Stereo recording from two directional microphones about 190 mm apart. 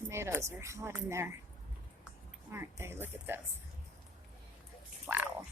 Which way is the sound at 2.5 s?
10° right (ahead or behind).